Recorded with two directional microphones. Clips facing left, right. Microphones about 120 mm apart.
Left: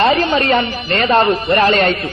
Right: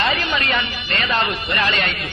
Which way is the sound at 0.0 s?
35° left (ahead or behind).